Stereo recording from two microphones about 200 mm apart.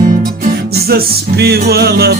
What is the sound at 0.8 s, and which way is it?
Music, 50° right (ahead or behind).